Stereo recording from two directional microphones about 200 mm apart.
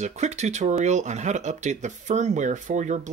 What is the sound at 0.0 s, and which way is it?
Speech, 35° right (ahead or behind).